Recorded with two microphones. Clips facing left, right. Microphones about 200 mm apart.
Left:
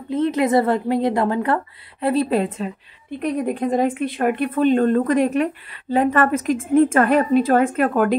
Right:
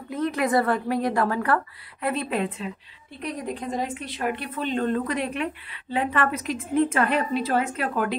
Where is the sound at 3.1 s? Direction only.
55° left (ahead or behind).